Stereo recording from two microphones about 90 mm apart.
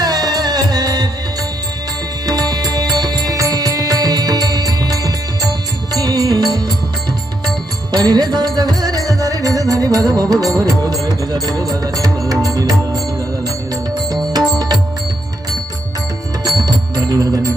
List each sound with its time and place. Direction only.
0.0 s music: 50° right (ahead or behind)
2.2 s music: 45° right (ahead or behind)
7.9 s music: 45° right (ahead or behind)
13.9 s music: 50° right (ahead or behind)
16.6 s music: 45° right (ahead or behind)